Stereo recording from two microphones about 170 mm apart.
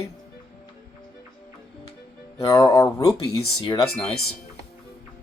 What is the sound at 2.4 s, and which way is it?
Speech, 20° left (ahead or behind).